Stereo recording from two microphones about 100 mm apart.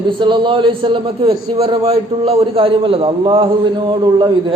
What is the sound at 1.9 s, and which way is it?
A man's voice, 85° right.